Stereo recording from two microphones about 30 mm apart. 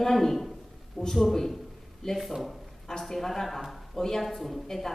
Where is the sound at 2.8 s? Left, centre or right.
Centre.